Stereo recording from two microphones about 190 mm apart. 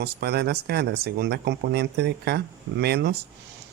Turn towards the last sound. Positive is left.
turn(degrees=-55)  # may be behind; listen again after turning